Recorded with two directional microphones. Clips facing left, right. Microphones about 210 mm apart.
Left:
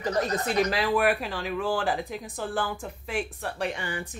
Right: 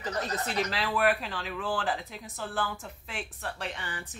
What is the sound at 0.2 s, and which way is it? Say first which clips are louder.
Speech: left 6 dB; 15° left (ahead or behind).